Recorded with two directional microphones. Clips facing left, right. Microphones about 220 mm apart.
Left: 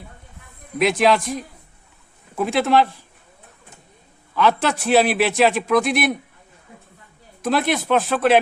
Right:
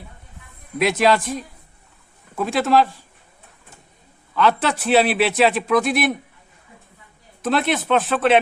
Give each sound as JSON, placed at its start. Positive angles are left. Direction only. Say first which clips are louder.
{"t": 0.8, "sound": "a man's voice", "louder": "even", "side_deg": 0}
{"t": 4.4, "sound": "a man's voice", "louder": "even", "side_deg": 0}
{"t": 7.4, "sound": "a man's voice", "louder": "even", "side_deg": 0}